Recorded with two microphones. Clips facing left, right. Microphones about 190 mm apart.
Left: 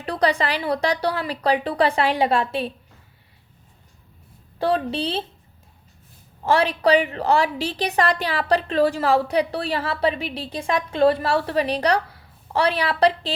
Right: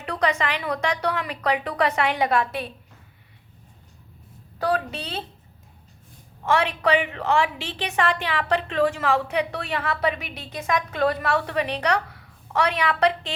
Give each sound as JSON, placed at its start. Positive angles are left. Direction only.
{"t": 0.0, "sound": "a woman's voice", "side_deg": 35}
{"t": 4.6, "sound": "a woman's voice", "side_deg": 30}
{"t": 6.4, "sound": "a woman's voice", "side_deg": 35}